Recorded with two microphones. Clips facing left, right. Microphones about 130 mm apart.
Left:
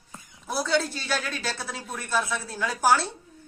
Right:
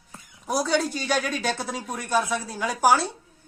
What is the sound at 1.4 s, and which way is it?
Speech, 50° right (ahead or behind).